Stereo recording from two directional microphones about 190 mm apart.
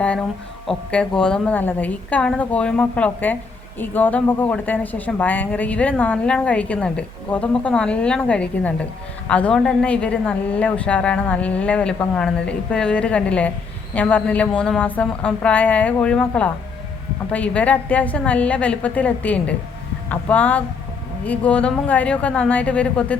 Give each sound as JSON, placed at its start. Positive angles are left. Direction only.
{"t": 0.7, "sound": "a woman's voice", "side_deg": 5}